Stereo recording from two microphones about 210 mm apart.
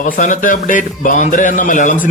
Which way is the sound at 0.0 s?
35° left (ahead or behind).